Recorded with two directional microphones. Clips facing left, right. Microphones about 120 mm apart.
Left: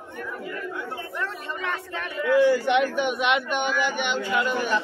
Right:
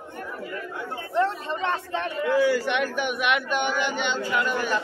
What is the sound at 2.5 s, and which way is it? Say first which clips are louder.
A man's voice: left 3 dB; 20° left (ahead or behind).